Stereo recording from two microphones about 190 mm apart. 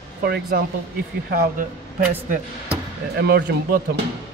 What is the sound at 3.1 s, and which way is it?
Speech, 60° right (ahead or behind).